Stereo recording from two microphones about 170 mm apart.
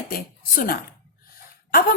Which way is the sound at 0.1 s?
60° left (ahead or behind).